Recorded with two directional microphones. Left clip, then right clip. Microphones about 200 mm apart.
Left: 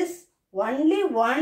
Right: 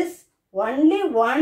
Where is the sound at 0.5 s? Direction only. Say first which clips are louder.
Right 3 dB; 20° right (ahead or behind).